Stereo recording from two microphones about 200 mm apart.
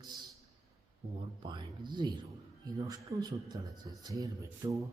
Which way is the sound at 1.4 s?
25° right (ahead or behind).